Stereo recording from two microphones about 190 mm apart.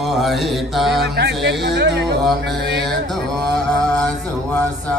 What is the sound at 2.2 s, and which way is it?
Mantra, centre (ahead or behind).